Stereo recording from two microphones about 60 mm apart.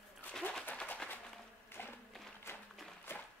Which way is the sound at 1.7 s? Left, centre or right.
Left.